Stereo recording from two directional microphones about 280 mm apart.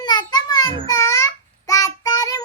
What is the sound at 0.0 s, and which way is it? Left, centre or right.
Child singing, centre.